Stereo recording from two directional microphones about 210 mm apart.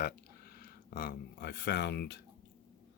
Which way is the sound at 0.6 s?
45° left (ahead or behind).